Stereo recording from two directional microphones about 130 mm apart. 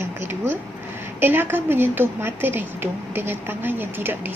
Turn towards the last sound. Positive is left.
turn(degrees=-15)  # may be behind; listen again after turning